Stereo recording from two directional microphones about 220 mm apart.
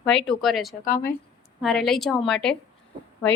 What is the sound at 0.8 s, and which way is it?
Speech, 40° left (ahead or behind).